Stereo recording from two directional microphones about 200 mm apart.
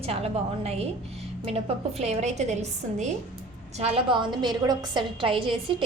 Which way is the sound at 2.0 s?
35° right (ahead or behind).